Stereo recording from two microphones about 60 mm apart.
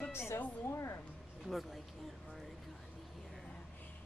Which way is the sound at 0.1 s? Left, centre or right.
Left.